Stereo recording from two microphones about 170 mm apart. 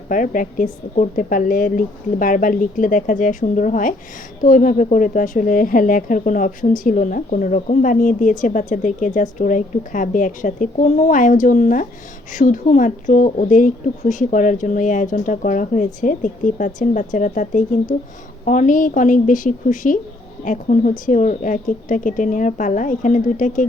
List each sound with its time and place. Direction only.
0.1 s speech: 50° left (ahead or behind)